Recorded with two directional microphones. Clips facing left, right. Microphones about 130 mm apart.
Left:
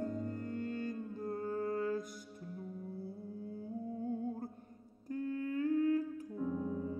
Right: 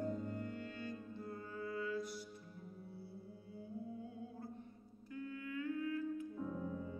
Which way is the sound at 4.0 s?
45° left (ahead or behind).